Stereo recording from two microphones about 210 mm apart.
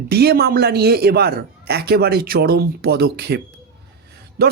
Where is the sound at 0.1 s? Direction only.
50° right (ahead or behind).